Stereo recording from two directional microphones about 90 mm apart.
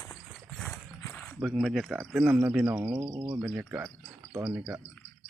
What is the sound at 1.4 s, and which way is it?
Speech, centre (ahead or behind).